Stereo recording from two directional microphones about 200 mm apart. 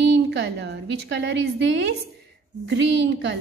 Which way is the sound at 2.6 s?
65° right (ahead or behind).